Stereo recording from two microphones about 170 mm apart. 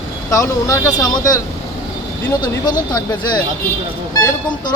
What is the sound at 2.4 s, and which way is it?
Speech, 25° left (ahead or behind).